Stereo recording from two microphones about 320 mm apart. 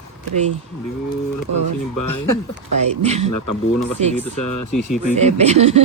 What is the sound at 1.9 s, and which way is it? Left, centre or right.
Speech, left.